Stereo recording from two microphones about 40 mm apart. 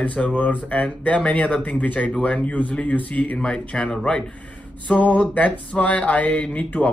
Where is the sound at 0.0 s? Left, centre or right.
Left.